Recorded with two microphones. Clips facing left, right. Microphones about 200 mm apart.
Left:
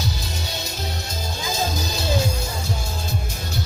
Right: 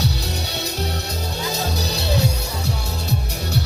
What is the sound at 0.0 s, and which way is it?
Music, 65° right (ahead or behind).